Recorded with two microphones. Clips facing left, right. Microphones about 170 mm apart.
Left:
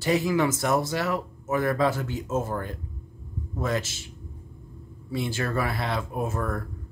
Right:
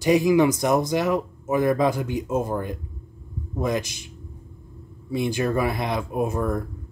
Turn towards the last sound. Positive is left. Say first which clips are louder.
# right 5 dB
turn(degrees=-15)  # may be behind; listen again after turning